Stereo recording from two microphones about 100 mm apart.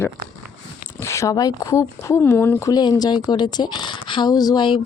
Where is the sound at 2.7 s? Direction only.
40° left (ahead or behind).